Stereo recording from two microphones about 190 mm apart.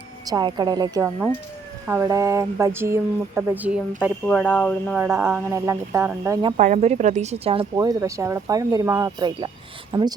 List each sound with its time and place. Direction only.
0.3 s speech: 20° right (ahead or behind); by 4.9 s centre (ahead or behind)
4.9 s speech: 10° right (ahead or behind)
6.6 s speech: 40° right (ahead or behind)
7.6 s speech: 15° right (ahead or behind)